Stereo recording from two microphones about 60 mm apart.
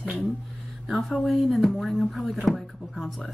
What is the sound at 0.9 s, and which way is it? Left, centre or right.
A woman's voice, centre.